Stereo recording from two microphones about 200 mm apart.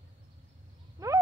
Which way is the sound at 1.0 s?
15° right (ahead or behind).